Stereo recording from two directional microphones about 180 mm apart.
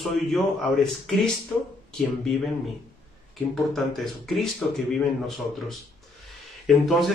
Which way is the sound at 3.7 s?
Centre (ahead or behind).